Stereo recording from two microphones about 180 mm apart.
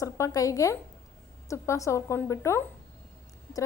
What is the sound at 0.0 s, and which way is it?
A woman's voice, 20° left (ahead or behind).